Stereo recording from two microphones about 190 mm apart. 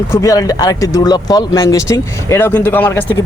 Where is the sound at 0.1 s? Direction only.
15° left (ahead or behind).